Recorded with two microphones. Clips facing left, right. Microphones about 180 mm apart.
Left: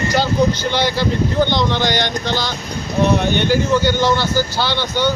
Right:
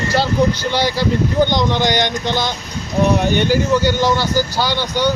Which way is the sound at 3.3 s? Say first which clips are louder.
Right 1 dB; 5° right (ahead or behind).